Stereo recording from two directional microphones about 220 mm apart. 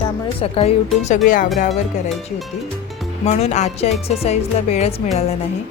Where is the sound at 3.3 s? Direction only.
30° left (ahead or behind).